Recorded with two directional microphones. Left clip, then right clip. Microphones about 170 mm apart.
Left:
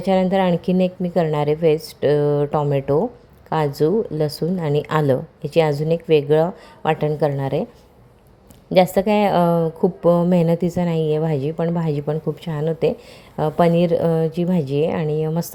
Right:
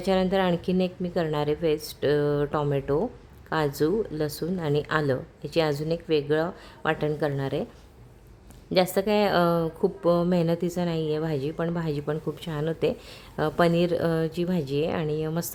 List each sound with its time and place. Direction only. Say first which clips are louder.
0.0 s a woman's voice: left 6 dB; 15° left (ahead or behind)
8.7 s a woman's voice: left 7 dB; 15° left (ahead or behind)